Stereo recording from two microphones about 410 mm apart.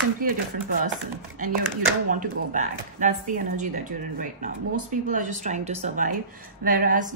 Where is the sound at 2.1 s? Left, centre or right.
Centre.